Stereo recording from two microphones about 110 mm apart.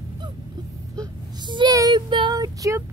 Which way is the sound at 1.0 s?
45° right (ahead or behind).